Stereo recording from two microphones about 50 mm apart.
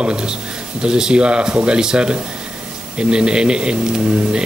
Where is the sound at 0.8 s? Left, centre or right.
Centre.